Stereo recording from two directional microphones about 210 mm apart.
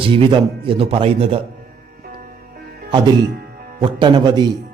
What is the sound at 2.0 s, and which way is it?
Music, 45° right (ahead or behind).